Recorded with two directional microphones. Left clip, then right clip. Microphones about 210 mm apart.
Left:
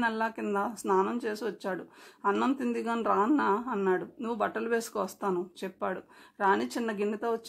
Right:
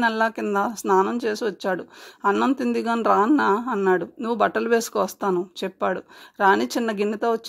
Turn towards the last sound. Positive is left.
turn(degrees=-30)  # may be behind; listen again after turning